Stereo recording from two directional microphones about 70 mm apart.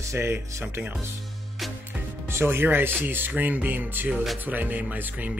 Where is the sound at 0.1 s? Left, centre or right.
Right.